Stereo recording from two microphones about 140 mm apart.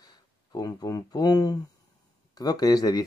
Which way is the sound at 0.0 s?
25° left (ahead or behind).